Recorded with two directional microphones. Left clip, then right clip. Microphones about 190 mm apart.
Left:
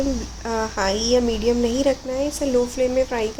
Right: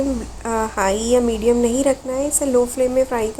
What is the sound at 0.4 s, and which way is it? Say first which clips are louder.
A woman's voice: right 3 dB; 15° right (ahead or behind).